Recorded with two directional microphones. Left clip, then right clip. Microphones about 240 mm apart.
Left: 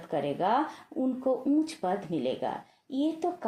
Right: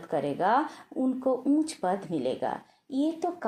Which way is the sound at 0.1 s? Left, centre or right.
Right.